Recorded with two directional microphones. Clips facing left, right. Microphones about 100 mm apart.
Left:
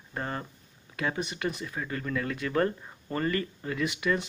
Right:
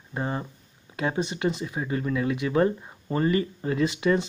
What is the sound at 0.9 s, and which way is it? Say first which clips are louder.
Speech: right 4 dB; 25° right (ahead or behind).